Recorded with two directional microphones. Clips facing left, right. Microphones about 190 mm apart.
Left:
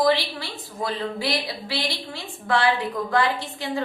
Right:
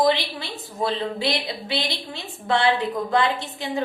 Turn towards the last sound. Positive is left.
turn(degrees=-20)  # may be behind; listen again after turning